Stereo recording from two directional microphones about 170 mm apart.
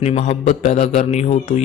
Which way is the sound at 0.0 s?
40° left (ahead or behind).